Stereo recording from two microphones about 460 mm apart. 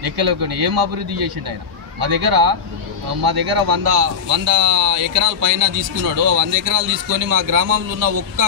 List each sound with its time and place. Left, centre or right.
0.0 s speech: right